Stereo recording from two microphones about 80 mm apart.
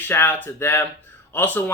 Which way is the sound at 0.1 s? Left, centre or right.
Left.